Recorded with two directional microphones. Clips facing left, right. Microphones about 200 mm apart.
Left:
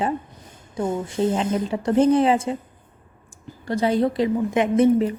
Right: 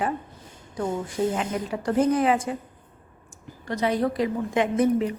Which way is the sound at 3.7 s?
30° left (ahead or behind).